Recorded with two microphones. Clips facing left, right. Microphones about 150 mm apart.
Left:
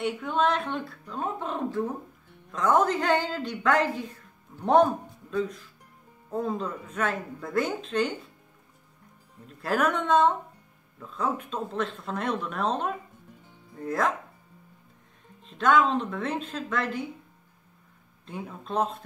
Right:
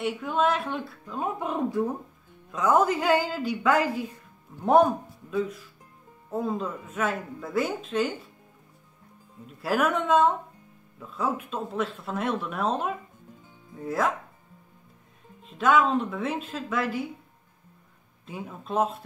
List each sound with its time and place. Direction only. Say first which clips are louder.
0.0 s a woman's voice: even; 5° right (ahead or behind)
9.5 s speech: right 1 dB; 5° right (ahead or behind)
15.4 s speech: even; 5° right (ahead or behind)
18.2 s speech: even; 5° right (ahead or behind)